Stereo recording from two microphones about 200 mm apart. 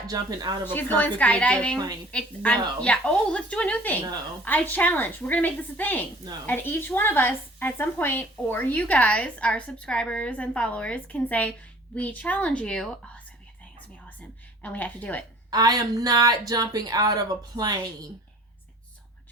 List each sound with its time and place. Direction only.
0.1 s speech: 20° right (ahead or behind)
0.6 s a woman's voice: 10° left (ahead or behind)
14.2 s a sound: 5° left (ahead or behind)
15.4 s speech: 20° right (ahead or behind)